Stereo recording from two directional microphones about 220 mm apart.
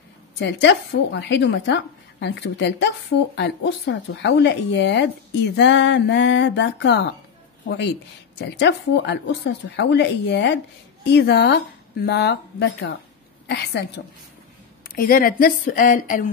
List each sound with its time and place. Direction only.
0.4 s a woman's voice: 50° left (ahead or behind)